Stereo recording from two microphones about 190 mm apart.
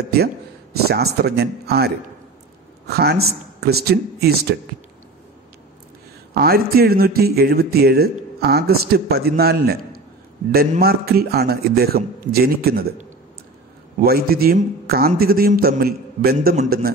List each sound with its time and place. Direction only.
0.8 s a man's voice: 55° right (ahead or behind)
2.9 s a man's voice: 55° right (ahead or behind)
6.3 s a man's voice: 55° right (ahead or behind)
10.8 s a man's voice: 55° right (ahead or behind)
13.9 s a man's voice: 55° right (ahead or behind)